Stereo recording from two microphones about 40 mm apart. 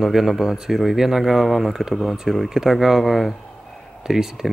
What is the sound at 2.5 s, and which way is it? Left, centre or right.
Speech, centre.